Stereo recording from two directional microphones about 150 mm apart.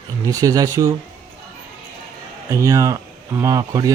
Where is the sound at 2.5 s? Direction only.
20° right (ahead or behind).